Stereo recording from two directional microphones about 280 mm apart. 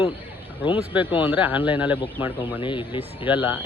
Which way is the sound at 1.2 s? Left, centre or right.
Centre.